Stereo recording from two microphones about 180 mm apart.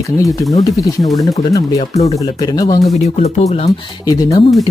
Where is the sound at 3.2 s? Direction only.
35° left (ahead or behind).